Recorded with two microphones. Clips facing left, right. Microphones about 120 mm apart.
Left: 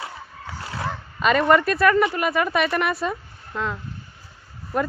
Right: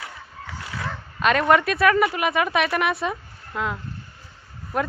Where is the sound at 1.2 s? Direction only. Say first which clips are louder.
Left 1 dB; centre (ahead or behind).